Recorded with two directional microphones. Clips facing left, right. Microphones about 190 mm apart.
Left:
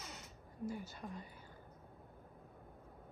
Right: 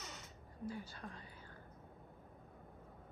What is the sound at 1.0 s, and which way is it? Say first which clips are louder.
Speech: left 3 dB; 5° left (ahead or behind).